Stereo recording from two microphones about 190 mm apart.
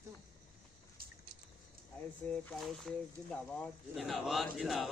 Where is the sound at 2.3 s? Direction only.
5° left (ahead or behind).